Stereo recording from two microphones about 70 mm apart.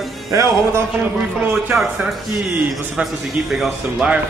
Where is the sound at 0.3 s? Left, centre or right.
Right.